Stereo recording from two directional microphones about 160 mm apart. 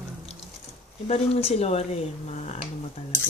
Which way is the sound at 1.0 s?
40° left (ahead or behind).